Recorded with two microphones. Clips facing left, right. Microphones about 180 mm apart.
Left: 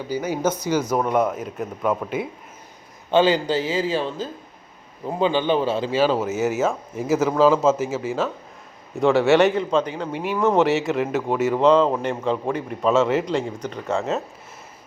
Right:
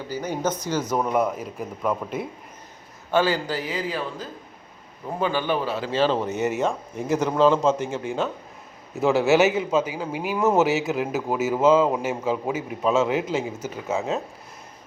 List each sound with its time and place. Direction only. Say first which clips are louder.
0.1 s speech: left 3 dB; 10° left (ahead or behind)
0.9 s speech: right 1 dB; centre (ahead or behind)
3.1 s a man's voice: left 4 dB; 20° left (ahead or behind)
5.9 s speech: right 1 dB; 10° left (ahead or behind)